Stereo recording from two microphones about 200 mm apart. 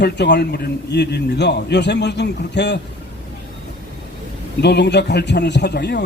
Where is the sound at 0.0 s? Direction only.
60° left (ahead or behind).